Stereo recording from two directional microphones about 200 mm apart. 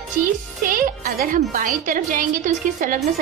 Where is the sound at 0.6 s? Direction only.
45° right (ahead or behind).